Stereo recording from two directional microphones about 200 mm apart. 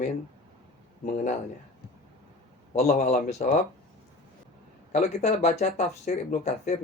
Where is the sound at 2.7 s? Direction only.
35° left (ahead or behind).